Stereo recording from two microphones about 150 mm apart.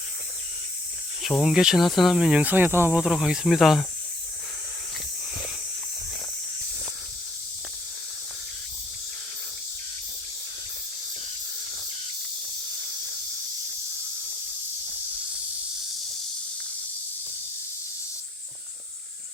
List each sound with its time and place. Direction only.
1.2 s speech: centre (ahead or behind)